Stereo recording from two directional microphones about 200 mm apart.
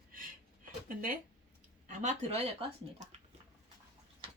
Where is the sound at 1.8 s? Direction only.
35° right (ahead or behind).